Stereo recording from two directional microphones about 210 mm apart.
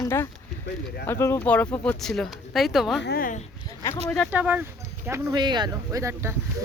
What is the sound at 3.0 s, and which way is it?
Speech, 45° left (ahead or behind).